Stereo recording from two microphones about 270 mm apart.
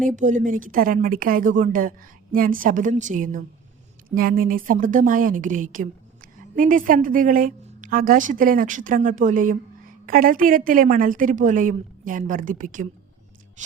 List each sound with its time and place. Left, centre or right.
0.2 s a woman's voice: right